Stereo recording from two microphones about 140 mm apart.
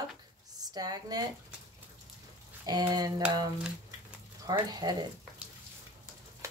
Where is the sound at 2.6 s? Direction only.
30° right (ahead or behind).